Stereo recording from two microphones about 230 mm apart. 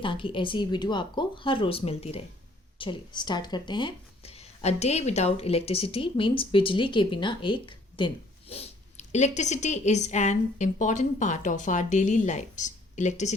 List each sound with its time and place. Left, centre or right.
0.0 s speech: left